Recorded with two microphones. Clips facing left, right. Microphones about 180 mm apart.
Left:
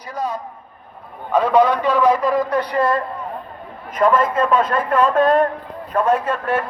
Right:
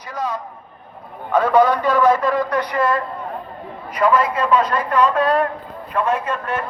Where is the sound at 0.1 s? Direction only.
30° left (ahead or behind).